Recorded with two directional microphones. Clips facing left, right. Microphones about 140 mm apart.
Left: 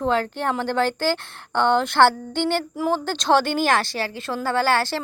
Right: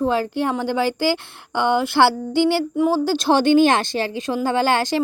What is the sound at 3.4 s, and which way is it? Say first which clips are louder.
A woman's voice: right 6 dB; 20° right (ahead or behind).